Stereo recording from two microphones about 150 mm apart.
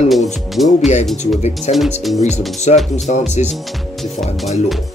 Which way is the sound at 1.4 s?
45° left (ahead or behind).